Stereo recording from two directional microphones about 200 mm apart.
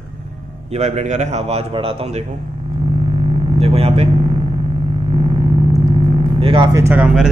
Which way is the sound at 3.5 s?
30° right (ahead or behind).